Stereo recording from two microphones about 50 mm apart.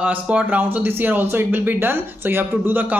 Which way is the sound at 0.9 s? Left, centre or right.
Right.